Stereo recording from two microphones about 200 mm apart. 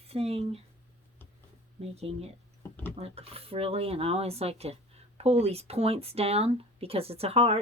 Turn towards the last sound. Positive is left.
turn(degrees=-30)  # may be behind; listen again after turning